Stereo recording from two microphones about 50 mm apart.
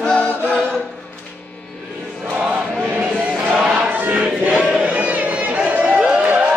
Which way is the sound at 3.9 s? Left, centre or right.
Right.